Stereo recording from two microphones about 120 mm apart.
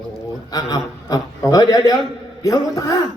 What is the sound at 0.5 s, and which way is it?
A man's voice, 30° left (ahead or behind).